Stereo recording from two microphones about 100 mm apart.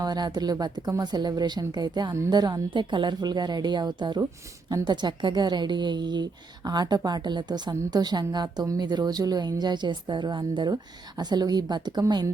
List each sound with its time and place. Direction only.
0.0 s a woman's voice: 45° right (ahead or behind)